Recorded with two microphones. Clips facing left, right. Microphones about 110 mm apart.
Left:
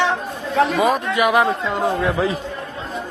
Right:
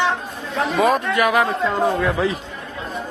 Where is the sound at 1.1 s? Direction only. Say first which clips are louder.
Left 1 dB; 20° left (ahead or behind).